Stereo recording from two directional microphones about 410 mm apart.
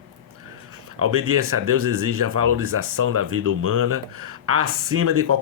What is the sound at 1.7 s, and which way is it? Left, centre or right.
Speech, right.